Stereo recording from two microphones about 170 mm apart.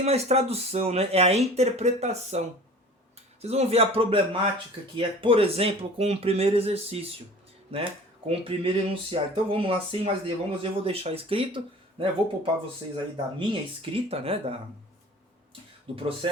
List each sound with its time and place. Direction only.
0.0 s speech: 40° right (ahead or behind)
3.4 s speech: 40° right (ahead or behind)
13.5 s speech: 30° right (ahead or behind)
16.0 s speech: 30° right (ahead or behind)